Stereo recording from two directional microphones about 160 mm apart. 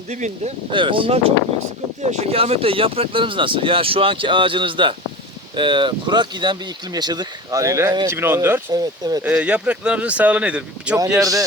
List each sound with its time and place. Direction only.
0.1 s speech: 50° right (ahead or behind)
0.7 s speech: 30° right (ahead or behind); by 8.6 s 15° right (ahead or behind)
8.7 s speech: 25° right (ahead or behind)
9.2 s speech: 10° right (ahead or behind)
11.2 s speech: 20° right (ahead or behind)